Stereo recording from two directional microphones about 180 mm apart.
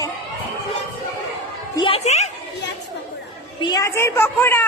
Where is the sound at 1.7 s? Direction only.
30° left (ahead or behind).